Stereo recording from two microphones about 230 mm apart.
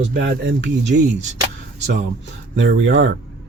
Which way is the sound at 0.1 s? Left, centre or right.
Right.